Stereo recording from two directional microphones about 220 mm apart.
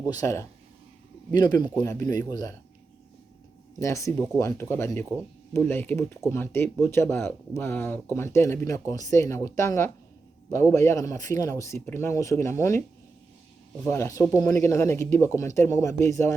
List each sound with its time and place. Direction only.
0.0 s speech: 15° left (ahead or behind)
3.8 s speech: 15° left (ahead or behind)
13.8 s speech: 15° left (ahead or behind)